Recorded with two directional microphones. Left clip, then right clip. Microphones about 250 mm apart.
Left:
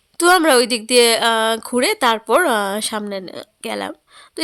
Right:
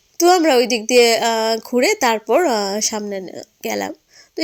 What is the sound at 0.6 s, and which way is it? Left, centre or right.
Speech, left.